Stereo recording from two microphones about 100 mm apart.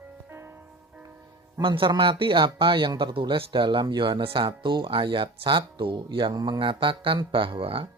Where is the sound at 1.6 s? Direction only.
55° right (ahead or behind).